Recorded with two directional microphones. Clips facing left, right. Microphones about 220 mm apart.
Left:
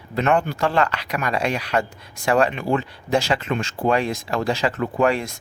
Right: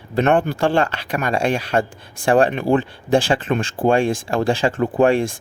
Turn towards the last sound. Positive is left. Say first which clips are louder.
# right 5 dB
turn(degrees=-30)  # may be behind; listen again after turning